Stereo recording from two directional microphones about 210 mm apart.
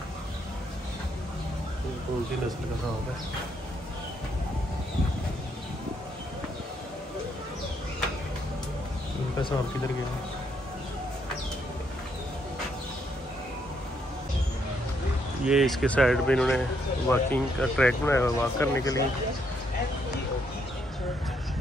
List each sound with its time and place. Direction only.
15.4 s speech: centre (ahead or behind); by 19.0 s 15° left (ahead or behind)